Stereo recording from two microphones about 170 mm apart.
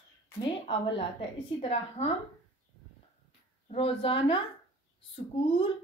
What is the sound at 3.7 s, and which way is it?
A woman's voice, 35° left (ahead or behind).